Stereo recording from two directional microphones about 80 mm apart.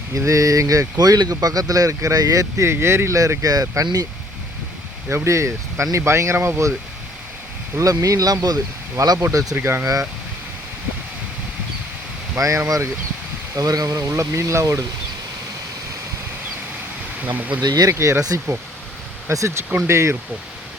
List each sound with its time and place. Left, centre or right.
0.1 s speech: right
0.9 s speech: right
5.0 s speech: right
7.8 s speech: right
9.1 s speech: right
9.8 s speech: right
12.4 s speech: right
17.2 s speech: right
17.6 s speech: right
17.9 s speech: right
19.3 s speech: right